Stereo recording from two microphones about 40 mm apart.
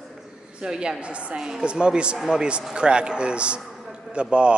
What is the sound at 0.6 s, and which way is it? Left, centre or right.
A man's voice, right.